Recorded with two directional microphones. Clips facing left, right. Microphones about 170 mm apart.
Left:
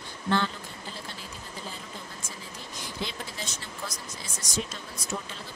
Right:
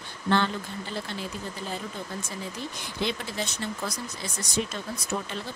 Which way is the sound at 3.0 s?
65° right (ahead or behind).